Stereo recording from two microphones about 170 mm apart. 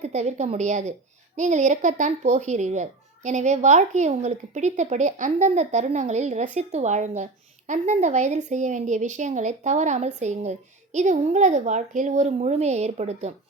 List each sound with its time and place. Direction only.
0.0 s a woman's voice: 40° right (ahead or behind)